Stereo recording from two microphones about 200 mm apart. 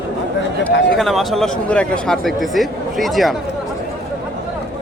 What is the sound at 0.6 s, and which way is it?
Speech, centre (ahead or behind).